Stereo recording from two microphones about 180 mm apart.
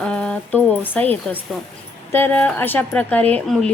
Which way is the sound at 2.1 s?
10° left (ahead or behind).